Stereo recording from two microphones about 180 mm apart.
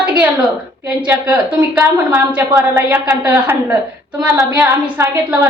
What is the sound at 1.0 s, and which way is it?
A woman's voice, 10° right (ahead or behind).